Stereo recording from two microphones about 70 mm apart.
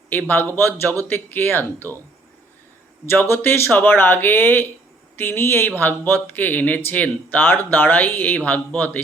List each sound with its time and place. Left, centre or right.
0.1 s speech: left
3.1 s speech: left